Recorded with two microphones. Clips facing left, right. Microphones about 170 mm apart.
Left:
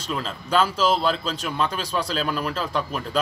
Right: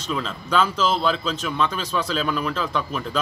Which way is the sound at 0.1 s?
35° left (ahead or behind).